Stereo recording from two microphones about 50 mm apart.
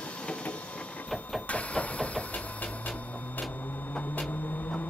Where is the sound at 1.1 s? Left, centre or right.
Centre.